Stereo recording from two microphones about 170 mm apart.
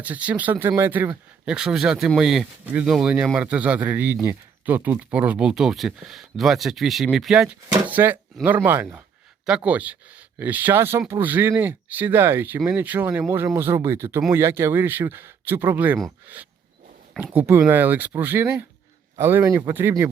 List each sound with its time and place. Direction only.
0.0 s speech: 10° right (ahead or behind)